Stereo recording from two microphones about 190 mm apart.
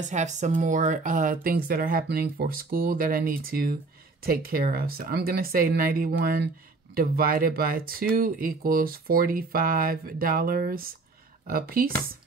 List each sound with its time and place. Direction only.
0.0 s speech: 40° right (ahead or behind)